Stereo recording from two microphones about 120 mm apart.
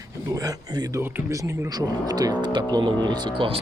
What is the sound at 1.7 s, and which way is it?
Speech, 35° right (ahead or behind).